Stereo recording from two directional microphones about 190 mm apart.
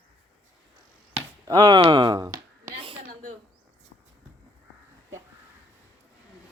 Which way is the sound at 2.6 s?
30° right (ahead or behind).